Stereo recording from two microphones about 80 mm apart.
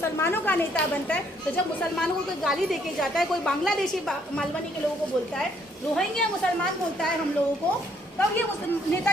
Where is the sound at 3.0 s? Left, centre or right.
Centre.